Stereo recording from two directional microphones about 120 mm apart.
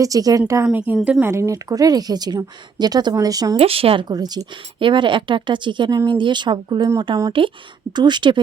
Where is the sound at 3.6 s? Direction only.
55° right (ahead or behind).